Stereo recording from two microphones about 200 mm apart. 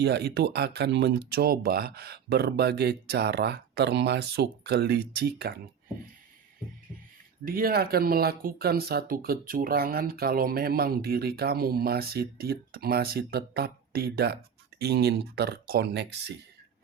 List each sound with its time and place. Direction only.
0.0 s speech: 55° right (ahead or behind)
7.4 s speech: 50° right (ahead or behind)